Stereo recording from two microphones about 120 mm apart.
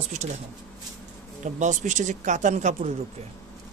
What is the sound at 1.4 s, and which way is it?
Speech, 85° right.